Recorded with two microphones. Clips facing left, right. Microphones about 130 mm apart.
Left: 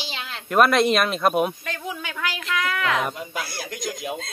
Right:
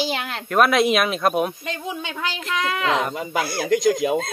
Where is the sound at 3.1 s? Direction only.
65° right (ahead or behind).